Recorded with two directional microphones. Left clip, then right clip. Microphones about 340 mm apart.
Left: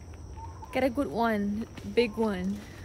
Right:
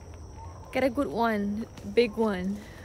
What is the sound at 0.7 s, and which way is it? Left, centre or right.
Speech, centre.